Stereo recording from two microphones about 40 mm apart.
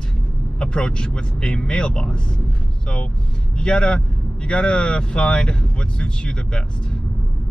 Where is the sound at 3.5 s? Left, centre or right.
Left.